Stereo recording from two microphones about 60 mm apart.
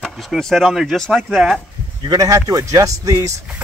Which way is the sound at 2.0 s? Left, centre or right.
Right.